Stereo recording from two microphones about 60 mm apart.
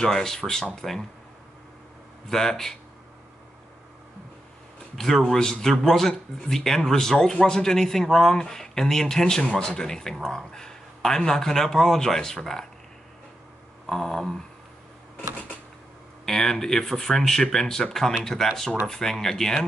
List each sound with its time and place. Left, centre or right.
0.0 s speech: centre
2.2 s speech: centre
4.9 s speech: centre
13.8 s speech: centre
16.3 s speech: centre